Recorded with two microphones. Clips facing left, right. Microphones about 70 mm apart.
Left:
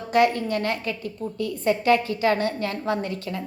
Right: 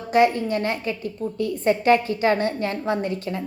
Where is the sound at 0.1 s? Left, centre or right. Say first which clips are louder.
Right 2 dB; right.